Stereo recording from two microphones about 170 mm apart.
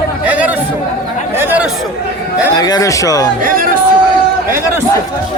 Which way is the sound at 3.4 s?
55° right (ahead or behind).